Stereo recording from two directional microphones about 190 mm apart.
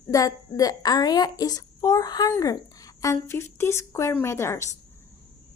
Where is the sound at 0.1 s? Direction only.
20° left (ahead or behind).